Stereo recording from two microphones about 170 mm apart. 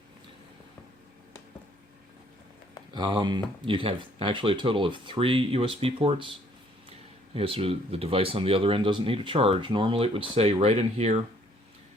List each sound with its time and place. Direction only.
2.9 s speech: 25° right (ahead or behind)
7.3 s speech: 35° right (ahead or behind)